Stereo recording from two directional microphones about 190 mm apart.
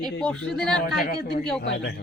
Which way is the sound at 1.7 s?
65° left (ahead or behind).